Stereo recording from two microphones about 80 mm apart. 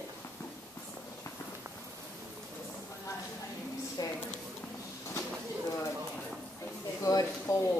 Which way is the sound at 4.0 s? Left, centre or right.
Left.